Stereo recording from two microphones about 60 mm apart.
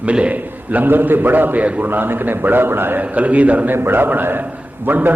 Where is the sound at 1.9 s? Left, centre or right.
Right.